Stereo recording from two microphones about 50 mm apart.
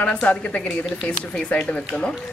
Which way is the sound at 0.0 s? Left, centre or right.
Left.